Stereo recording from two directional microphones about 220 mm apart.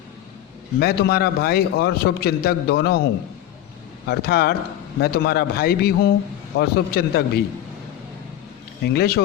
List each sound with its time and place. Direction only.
0.8 s a man's voice: 45° left (ahead or behind)
4.0 s a man's voice: 45° left (ahead or behind)
8.8 s a man's voice: 45° left (ahead or behind)